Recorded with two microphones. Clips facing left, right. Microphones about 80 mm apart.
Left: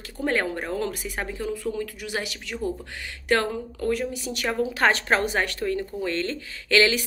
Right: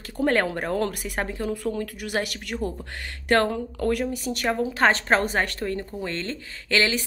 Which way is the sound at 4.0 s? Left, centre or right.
Right.